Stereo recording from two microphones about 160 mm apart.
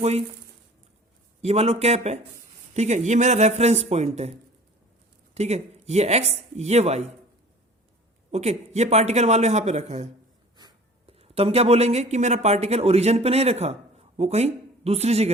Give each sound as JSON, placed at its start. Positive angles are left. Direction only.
{"t": 0.0, "sound": "speech", "side_deg": -40}
{"t": 1.4, "sound": "speech", "side_deg": -40}
{"t": 8.3, "sound": "speech", "side_deg": -45}
{"t": 10.6, "sound": "a sound", "side_deg": -25}
{"t": 11.2, "sound": "speech", "side_deg": -40}